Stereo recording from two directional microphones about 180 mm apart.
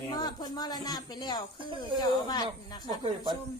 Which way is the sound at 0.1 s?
25° left (ahead or behind).